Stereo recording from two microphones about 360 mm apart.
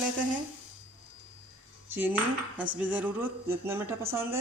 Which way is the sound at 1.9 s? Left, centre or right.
Centre.